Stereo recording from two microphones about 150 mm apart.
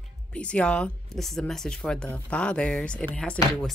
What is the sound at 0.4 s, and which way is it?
Speech, 5° left (ahead or behind).